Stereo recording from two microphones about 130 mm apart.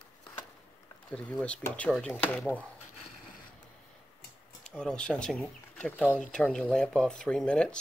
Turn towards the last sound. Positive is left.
turn(degrees=5)  # may be behind; listen again after turning